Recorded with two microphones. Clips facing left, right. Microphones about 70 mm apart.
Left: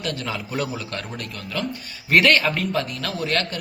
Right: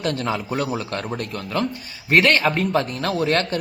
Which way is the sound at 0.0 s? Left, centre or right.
Right.